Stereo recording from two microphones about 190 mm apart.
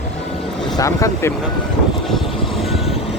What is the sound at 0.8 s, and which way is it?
Speech, 15° left (ahead or behind).